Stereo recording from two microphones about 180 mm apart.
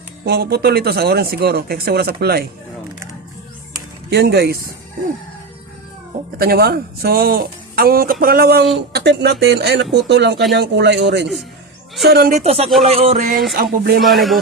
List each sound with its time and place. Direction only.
0.3 s speech: 60° right (ahead or behind)
4.1 s speech: 65° right (ahead or behind)
6.4 s speech: 60° right (ahead or behind); by 11.3 s 80° right
12.0 s speech: 60° right (ahead or behind)
12.3 s music: 35° right (ahead or behind)
13.5 s speech: 55° right (ahead or behind)
14.0 s speech: centre (ahead or behind)